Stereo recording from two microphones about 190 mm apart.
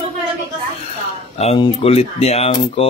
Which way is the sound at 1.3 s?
30° left (ahead or behind).